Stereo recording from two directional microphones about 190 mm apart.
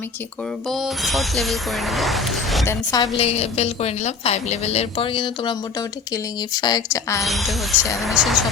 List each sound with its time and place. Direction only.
0.7 s speech: centre (ahead or behind)
2.6 s speech: 20° left (ahead or behind)
3.2 s a woman's voice: 35° left (ahead or behind)
7.2 s speech: centre (ahead or behind)